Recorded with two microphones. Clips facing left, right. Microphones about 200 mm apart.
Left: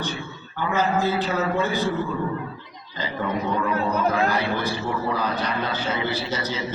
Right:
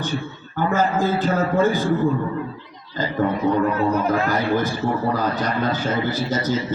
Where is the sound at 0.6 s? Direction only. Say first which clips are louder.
Right 3 dB; 45° right (ahead or behind).